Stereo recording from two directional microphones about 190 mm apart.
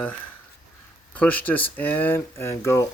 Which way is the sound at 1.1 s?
10° left (ahead or behind).